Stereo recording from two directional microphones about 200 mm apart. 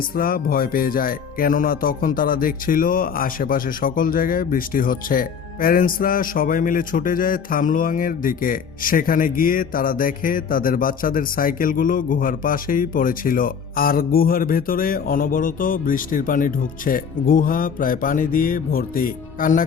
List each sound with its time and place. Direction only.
0.2 s music: 45° left (ahead or behind)